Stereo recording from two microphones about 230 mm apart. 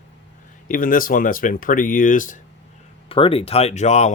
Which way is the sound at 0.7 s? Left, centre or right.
Left.